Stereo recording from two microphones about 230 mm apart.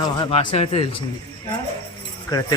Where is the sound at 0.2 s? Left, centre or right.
Left.